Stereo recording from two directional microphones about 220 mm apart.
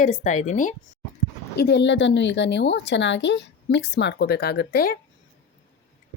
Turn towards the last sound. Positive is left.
turn(degrees=45)  # may be behind; listen again after turning